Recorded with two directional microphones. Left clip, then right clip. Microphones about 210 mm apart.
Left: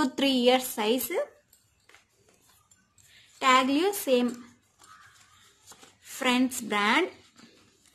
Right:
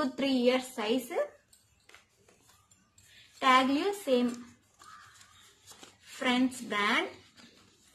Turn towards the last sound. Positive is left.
turn(degrees=50)  # may be behind; listen again after turning